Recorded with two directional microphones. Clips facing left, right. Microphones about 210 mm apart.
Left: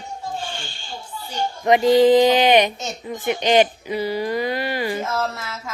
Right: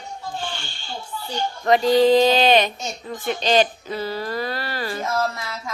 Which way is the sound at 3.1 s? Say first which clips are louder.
Left 2 dB; 15° left (ahead or behind).